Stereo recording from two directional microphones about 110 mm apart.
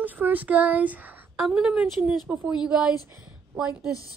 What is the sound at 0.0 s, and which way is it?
A woman's voice, 15° right (ahead or behind).